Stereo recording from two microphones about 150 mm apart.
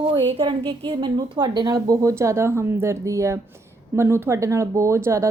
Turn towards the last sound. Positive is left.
turn(degrees=-20)  # may be behind; listen again after turning